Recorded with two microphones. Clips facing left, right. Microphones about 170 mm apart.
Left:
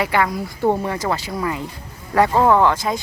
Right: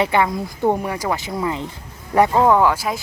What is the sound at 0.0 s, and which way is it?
Speech, 20° right (ahead or behind).